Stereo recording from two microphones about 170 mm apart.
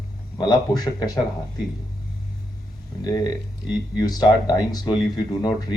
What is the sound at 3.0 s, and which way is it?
Speech, 20° left (ahead or behind).